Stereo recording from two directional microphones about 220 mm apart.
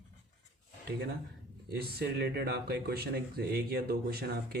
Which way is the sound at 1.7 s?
45° right (ahead or behind).